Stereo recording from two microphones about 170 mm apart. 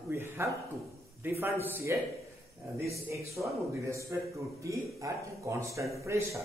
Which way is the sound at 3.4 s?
10° right (ahead or behind).